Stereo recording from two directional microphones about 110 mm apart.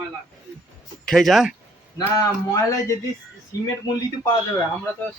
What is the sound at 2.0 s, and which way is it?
Speech, 30° left (ahead or behind).